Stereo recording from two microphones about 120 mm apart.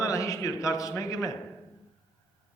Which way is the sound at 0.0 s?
30° left (ahead or behind).